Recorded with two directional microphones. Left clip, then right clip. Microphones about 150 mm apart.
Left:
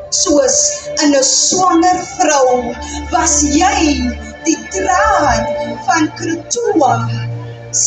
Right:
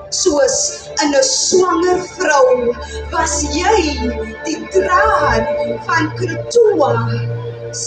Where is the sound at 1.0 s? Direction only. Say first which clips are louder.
Left 1 dB; 40° right (ahead or behind).